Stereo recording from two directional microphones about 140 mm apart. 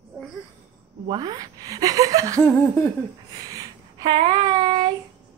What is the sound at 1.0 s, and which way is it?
Speech, 30° right (ahead or behind).